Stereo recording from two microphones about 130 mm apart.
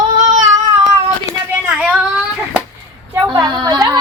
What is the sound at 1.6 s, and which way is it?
Child singing, 5° right (ahead or behind).